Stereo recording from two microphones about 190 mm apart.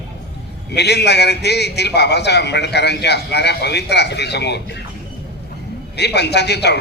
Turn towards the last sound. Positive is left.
turn(degrees=60)  # may be behind; listen again after turning